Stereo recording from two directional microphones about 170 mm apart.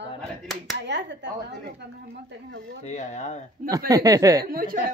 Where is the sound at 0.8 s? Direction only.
90° right.